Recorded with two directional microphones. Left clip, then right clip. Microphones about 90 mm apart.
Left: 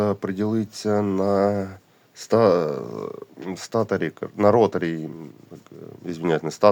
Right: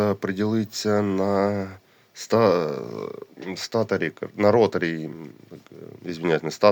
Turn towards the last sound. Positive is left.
turn(degrees=30)  # may be behind; listen again after turning